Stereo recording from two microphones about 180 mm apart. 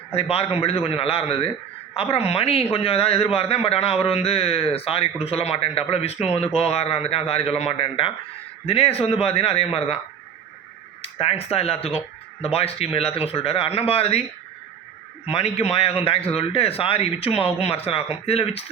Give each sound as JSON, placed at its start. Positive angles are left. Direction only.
{"t": 0.1, "sound": "a man's voice", "side_deg": 35}
{"t": 11.0, "sound": "a man's voice", "side_deg": 35}
{"t": 15.3, "sound": "a man's voice", "side_deg": 35}